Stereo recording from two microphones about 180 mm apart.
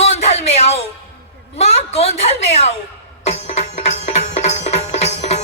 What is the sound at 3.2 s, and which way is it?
Music, 35° left (ahead or behind).